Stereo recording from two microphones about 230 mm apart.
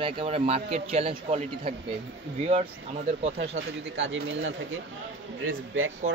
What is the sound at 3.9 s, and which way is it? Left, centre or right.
Speech, right.